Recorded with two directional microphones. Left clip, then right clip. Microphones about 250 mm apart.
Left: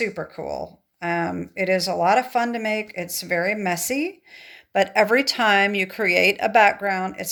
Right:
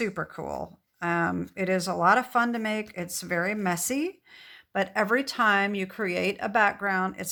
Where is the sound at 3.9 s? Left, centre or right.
Right.